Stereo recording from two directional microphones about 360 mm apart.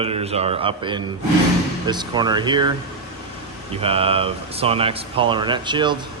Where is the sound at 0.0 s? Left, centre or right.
Centre.